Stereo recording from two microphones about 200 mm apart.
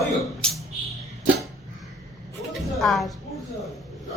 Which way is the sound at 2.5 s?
Centre (ahead or behind).